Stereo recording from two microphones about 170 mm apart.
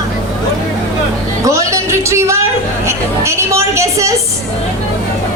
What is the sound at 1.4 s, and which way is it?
Music, 20° right (ahead or behind).